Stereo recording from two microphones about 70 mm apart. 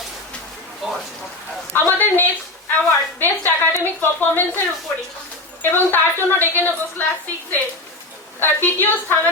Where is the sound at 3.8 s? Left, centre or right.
Left.